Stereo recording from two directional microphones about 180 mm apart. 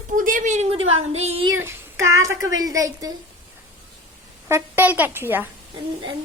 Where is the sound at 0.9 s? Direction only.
35° right (ahead or behind).